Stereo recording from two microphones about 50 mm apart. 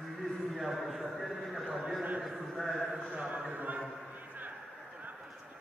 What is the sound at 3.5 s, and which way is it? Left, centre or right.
Speech, right.